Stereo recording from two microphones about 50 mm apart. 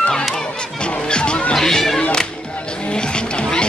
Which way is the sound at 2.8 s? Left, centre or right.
Centre.